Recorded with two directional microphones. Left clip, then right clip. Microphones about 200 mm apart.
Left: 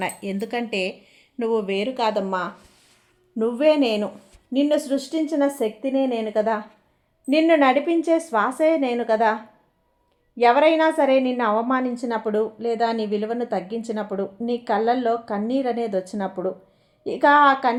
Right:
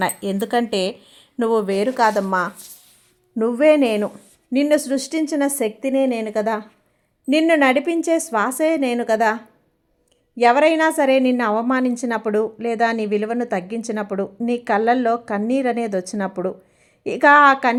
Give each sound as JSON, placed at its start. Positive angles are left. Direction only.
{"t": 0.3, "sound": "a woman's voice", "side_deg": -20}
{"t": 3.3, "sound": "a woman's voice", "side_deg": -25}